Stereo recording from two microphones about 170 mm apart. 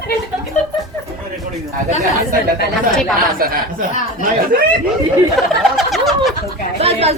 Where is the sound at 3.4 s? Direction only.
55° right (ahead or behind).